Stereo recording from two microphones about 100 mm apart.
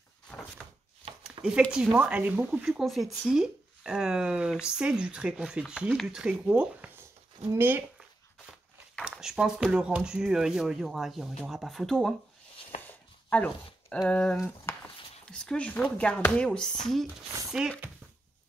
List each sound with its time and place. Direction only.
1.4 s a sound: 60° right (ahead or behind)
1.7 s speech: 5° right (ahead or behind)
2.6 s speech: centre (ahead or behind)
7.5 s speech: 20° right (ahead or behind)
9.0 s speech: 5° right (ahead or behind)
13.3 s speech: 10° left (ahead or behind)